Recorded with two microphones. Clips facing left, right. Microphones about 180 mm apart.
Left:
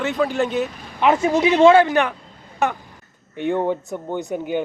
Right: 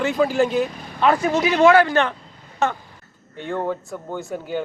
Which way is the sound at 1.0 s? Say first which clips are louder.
Left 1 dB; 20° left (ahead or behind).